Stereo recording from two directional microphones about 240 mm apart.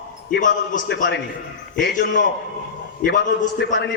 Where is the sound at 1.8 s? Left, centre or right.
Left.